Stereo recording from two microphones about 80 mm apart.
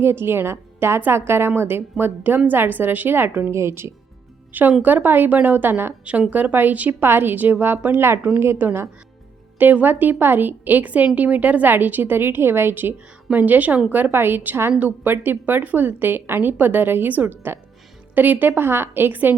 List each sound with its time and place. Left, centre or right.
0.0 s a woman's voice: right
4.8 s a woman's voice: right